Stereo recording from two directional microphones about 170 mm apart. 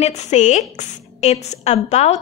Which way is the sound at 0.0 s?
45° left (ahead or behind).